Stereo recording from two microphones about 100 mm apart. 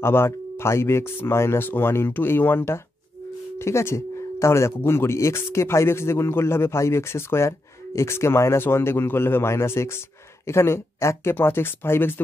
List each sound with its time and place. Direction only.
0.0 s speech: 25° left (ahead or behind)